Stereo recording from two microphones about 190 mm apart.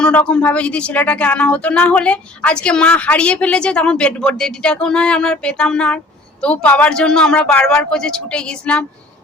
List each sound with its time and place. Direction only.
0.0 s speech: 5° left (ahead or behind)